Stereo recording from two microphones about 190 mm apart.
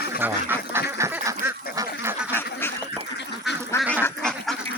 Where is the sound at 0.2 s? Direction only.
10° right (ahead or behind).